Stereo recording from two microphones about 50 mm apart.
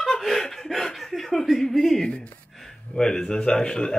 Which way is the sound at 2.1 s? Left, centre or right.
Left.